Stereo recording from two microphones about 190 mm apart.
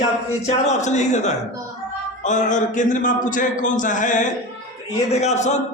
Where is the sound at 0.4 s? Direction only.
35° left (ahead or behind).